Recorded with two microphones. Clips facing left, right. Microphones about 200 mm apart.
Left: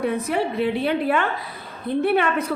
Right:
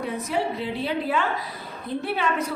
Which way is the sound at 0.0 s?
60° left (ahead or behind).